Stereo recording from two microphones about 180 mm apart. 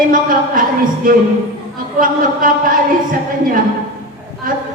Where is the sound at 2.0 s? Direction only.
50° right (ahead or behind).